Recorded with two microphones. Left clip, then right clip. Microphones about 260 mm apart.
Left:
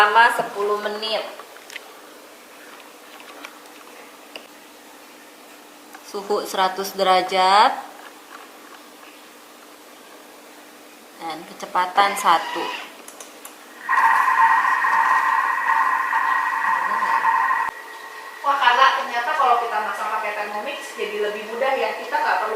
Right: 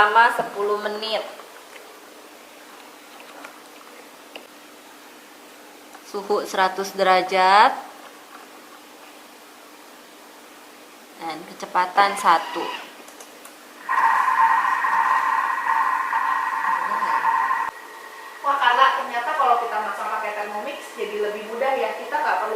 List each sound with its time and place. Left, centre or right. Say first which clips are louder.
0.0 s a woman's voice: left 1 dB; centre
0.9 s speech: left 1 dB; centre
6.1 s a woman's voice: even; centre
6.9 s a woman's voice: even; centre
11.7 s a woman's voice: even; centre
13.8 s a sound: left 2 dB; centre